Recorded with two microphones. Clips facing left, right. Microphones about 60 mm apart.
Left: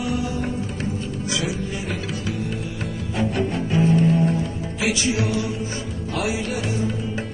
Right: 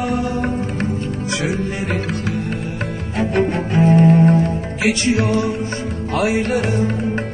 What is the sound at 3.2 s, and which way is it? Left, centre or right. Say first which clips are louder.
Music: right 6 dB; right.